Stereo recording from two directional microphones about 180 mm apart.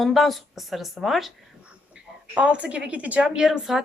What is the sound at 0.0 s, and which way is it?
A woman's voice, centre (ahead or behind).